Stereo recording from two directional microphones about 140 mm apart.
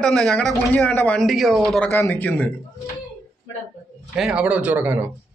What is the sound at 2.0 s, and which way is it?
Speech, 15° left (ahead or behind).